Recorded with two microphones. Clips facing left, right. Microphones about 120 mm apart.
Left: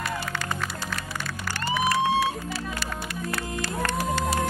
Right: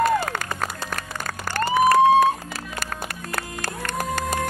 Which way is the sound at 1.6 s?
45° right (ahead or behind).